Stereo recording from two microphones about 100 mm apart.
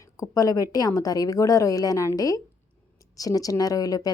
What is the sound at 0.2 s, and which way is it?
Speech, 35° left (ahead or behind).